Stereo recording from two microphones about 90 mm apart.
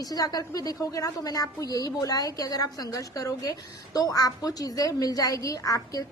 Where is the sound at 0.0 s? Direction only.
45° left (ahead or behind).